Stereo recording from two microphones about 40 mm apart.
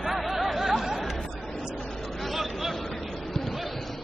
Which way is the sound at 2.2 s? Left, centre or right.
Centre.